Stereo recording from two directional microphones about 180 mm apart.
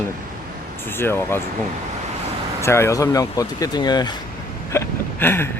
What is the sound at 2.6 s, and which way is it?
Speech, 15° left (ahead or behind).